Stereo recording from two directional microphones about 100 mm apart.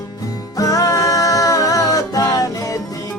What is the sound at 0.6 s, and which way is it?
Music, 35° left (ahead or behind).